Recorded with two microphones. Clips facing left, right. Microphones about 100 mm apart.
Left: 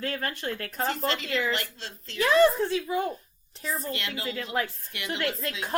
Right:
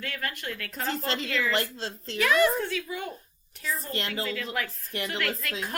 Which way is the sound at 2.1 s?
30° left (ahead or behind).